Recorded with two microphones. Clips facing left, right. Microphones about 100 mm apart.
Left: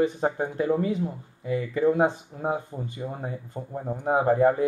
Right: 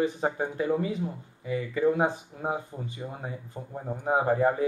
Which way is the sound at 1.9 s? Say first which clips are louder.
Left 3 dB; centre (ahead or behind).